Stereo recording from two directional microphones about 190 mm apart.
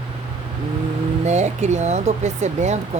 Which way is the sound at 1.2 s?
35° right (ahead or behind).